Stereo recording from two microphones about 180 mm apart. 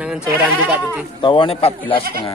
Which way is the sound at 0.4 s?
10° right (ahead or behind).